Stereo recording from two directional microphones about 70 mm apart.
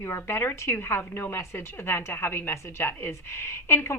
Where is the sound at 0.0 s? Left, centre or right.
Left.